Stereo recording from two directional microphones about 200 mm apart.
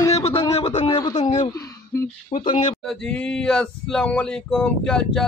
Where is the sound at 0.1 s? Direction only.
30° left (ahead or behind).